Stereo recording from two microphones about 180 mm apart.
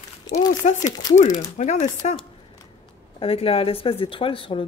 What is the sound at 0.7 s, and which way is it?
Speech, 20° left (ahead or behind).